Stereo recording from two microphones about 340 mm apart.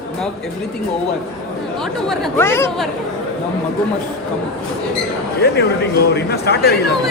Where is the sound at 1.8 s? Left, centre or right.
Centre.